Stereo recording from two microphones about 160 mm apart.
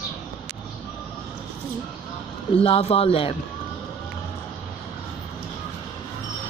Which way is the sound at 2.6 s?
40° left (ahead or behind).